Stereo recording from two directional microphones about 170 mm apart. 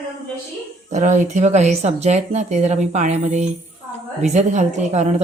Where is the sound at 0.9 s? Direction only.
45° right (ahead or behind).